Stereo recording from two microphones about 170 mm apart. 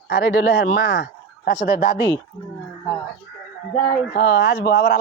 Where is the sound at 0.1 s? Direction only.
90° left; by 2.0 s 65° left (ahead or behind).